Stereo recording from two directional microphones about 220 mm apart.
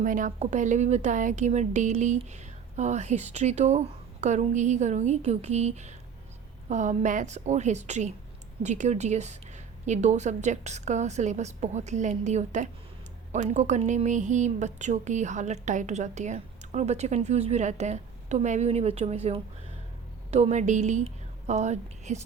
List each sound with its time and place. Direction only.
0.0 s a woman's voice: 35° right (ahead or behind)